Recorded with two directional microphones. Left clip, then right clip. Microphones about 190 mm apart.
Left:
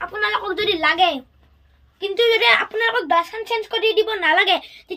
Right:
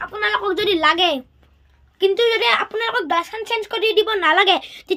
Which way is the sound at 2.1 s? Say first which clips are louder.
Left 4 dB; 20° right (ahead or behind).